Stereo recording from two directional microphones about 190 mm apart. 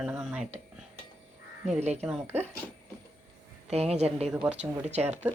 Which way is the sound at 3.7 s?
35° right (ahead or behind).